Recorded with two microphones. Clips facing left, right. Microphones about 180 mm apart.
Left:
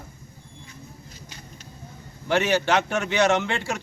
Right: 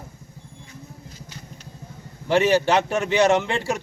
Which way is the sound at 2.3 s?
30° right (ahead or behind).